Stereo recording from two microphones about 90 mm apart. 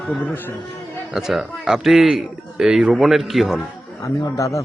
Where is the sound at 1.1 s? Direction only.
5° right (ahead or behind).